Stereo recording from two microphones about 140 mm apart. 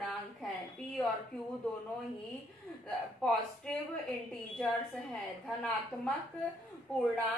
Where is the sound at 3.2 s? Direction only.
5° left (ahead or behind).